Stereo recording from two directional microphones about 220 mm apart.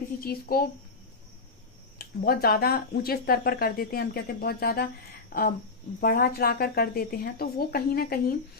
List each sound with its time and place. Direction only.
0.2 s speech: 40° left (ahead or behind)
2.0 s speech: 45° left (ahead or behind)